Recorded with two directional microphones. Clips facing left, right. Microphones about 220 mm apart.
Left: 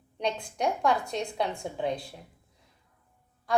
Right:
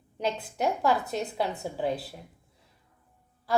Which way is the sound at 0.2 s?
5° right (ahead or behind).